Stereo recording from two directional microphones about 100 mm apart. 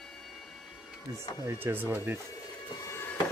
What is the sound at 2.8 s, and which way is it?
Music, 25° left (ahead or behind).